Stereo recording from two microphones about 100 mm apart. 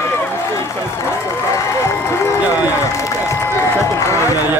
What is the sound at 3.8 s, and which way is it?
Speech, 30° left (ahead or behind).